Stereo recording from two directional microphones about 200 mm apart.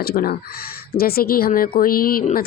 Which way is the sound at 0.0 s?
50° left (ahead or behind).